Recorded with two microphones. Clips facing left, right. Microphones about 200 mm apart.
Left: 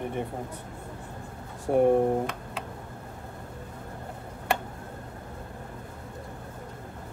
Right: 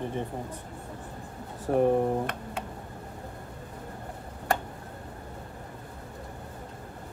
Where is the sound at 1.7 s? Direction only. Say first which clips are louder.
Left 2 dB; 15° left (ahead or behind).